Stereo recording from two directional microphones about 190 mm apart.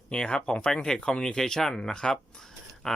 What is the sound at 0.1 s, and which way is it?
Speech, 5° left (ahead or behind).